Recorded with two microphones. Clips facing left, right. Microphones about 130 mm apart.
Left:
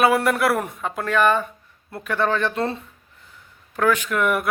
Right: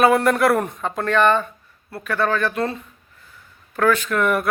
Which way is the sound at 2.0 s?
20° left (ahead or behind).